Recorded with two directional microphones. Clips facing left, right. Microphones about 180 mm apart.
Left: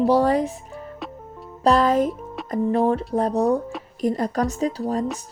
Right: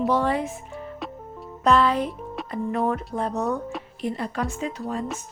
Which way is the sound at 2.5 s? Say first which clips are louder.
Left 5 dB; 30° left (ahead or behind).